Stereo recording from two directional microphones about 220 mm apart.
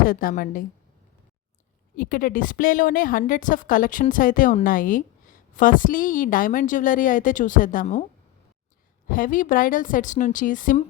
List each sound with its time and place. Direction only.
0.0 s a woman's voice: 40° left (ahead or behind)
2.0 s a woman's voice: 40° left (ahead or behind)
9.0 s a woman's voice: 40° left (ahead or behind)